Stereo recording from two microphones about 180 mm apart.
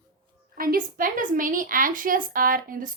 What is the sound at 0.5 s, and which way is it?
A woman's voice, 50° right (ahead or behind).